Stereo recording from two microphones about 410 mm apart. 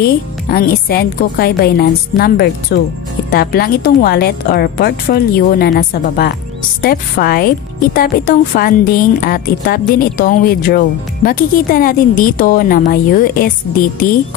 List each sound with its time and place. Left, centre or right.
0.5 s a woman's voice: left